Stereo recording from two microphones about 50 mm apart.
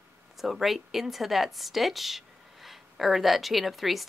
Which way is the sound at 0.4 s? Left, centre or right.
Centre.